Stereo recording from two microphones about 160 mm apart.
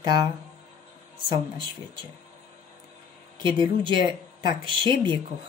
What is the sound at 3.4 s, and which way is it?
A woman's voice, 30° right (ahead or behind).